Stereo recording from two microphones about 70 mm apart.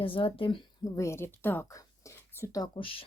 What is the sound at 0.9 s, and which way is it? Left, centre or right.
Speech, left.